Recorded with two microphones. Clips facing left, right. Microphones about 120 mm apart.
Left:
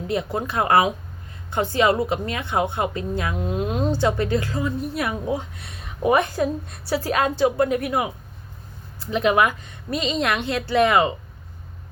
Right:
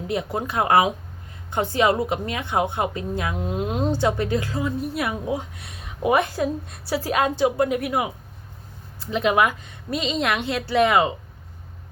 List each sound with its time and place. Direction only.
0.1 s a woman's voice: 10° right (ahead or behind)